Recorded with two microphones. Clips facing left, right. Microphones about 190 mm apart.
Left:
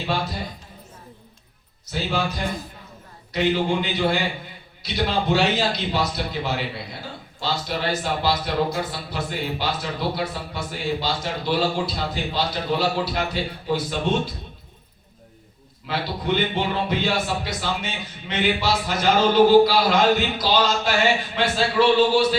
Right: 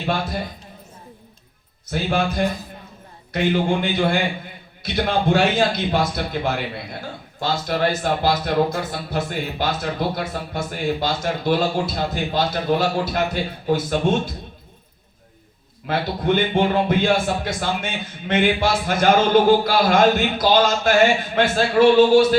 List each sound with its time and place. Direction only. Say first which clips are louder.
0.0 s a man's voice: right 2 dB; 50° right (ahead or behind)
1.9 s a man's voice: right 4 dB; 50° right (ahead or behind)
15.9 s a man's voice: right 4 dB; 50° right (ahead or behind)